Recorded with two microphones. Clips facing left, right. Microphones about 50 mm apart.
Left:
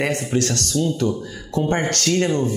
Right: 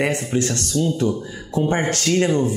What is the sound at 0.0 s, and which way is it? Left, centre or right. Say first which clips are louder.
Speech: even; centre.